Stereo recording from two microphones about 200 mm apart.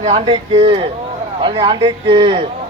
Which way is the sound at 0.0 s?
35° right (ahead or behind).